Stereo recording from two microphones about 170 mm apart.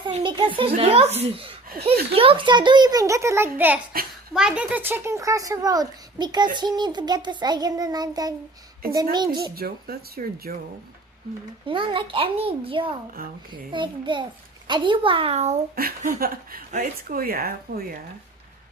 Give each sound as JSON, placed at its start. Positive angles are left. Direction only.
{"t": 0.0, "sound": "a child's voice", "side_deg": -30}
{"t": 9.6, "sound": "speech", "side_deg": -65}
{"t": 11.6, "sound": "a child's voice", "side_deg": -30}
{"t": 15.7, "sound": "speech", "side_deg": -55}